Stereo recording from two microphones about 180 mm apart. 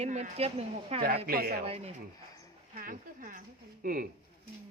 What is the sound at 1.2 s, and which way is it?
Speech, 55° right (ahead or behind).